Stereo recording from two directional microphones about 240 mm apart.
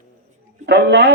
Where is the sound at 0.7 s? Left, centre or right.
Right.